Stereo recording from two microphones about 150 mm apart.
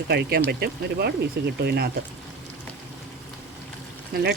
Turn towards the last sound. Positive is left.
turn(degrees=-90)